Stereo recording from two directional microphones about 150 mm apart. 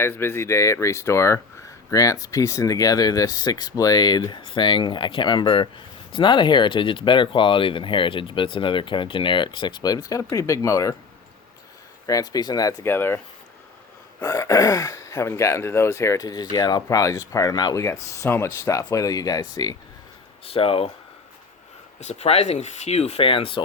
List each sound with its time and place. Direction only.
0.0 s speech: 15° left (ahead or behind)
12.0 s speech: 25° left (ahead or behind)
20.4 s speech: 40° left (ahead or behind)
22.0 s speech: 45° left (ahead or behind)